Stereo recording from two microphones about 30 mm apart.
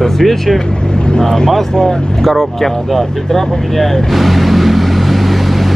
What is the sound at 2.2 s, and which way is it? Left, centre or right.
Speech, centre.